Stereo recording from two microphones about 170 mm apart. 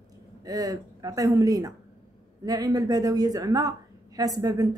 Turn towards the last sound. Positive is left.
turn(degrees=-20)  # may be behind; listen again after turning